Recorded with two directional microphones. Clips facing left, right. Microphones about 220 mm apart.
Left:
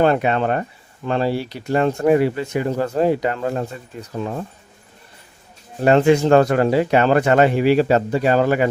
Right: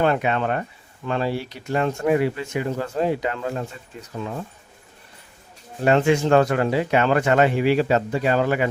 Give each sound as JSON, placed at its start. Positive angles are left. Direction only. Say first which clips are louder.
{"t": 0.0, "sound": "speech", "louder": "left 4 dB", "side_deg": 40}
{"t": 5.8, "sound": "speech", "louder": "left 4 dB", "side_deg": 40}